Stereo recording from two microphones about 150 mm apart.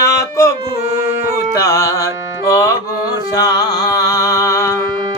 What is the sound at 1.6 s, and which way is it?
Music, 20° left (ahead or behind).